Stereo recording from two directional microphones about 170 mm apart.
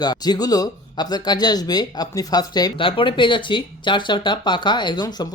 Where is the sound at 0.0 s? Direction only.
25° left (ahead or behind).